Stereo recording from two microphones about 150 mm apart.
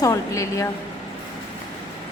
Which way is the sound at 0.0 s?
20° left (ahead or behind).